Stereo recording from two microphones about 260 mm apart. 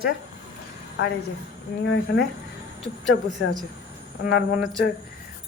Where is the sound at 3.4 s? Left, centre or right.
Left.